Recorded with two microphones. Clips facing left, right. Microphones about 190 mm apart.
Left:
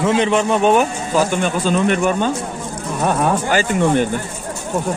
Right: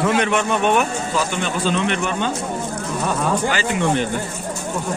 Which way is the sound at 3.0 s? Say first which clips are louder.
Left 4 dB; 55° left (ahead or behind).